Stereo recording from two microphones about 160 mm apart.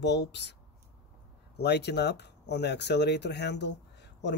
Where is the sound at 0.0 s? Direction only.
90° left.